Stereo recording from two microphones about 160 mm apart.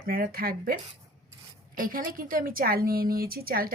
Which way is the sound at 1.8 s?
60° right (ahead or behind).